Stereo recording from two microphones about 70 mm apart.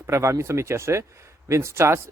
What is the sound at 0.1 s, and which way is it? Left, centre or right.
Speech, right.